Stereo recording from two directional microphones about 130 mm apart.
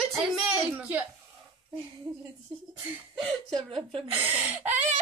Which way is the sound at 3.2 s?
Centre (ahead or behind).